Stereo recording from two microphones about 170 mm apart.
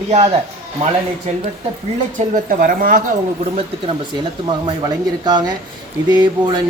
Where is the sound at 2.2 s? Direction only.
50° right (ahead or behind).